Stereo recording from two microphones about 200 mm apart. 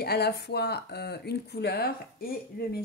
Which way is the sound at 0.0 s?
55° left (ahead or behind).